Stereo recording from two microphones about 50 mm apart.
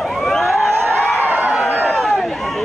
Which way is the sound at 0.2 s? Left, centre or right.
Centre.